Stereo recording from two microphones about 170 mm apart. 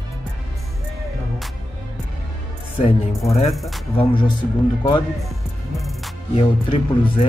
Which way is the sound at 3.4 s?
Centre (ahead or behind).